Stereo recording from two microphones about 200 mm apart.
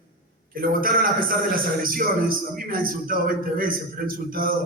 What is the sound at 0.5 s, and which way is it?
A man's voice, 45° right (ahead or behind).